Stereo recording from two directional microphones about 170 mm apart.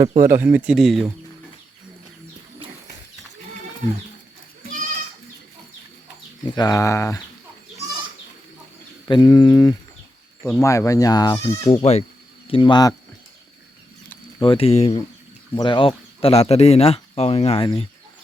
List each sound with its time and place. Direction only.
0.0 s speech: 20° right (ahead or behind); by 1.0 s centre (ahead or behind)
6.6 s speech: 20° left (ahead or behind)
9.0 s speech: 25° left (ahead or behind)
11.8 s speech: 40° left (ahead or behind)
14.4 s speech: 35° left (ahead or behind)